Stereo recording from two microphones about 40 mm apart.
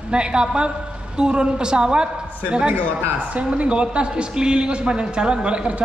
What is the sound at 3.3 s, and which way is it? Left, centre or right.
A man's voice, right.